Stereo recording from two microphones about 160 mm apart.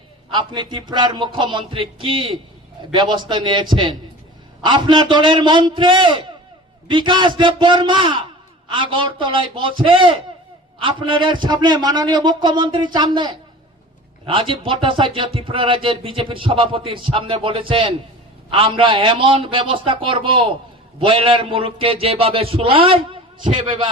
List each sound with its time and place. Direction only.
0.3 s a man's voice: 30° right (ahead or behind)